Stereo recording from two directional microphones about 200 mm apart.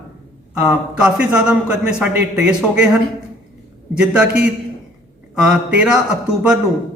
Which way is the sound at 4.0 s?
5° right (ahead or behind).